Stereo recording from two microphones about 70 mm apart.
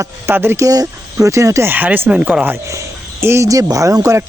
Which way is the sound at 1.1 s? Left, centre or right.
Right.